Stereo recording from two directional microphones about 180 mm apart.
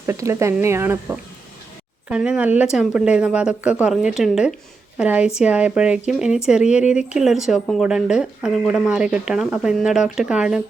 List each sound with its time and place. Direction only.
0.0 s speech: 15° right (ahead or behind)